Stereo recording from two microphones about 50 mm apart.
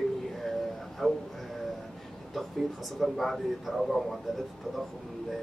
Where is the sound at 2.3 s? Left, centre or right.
Centre.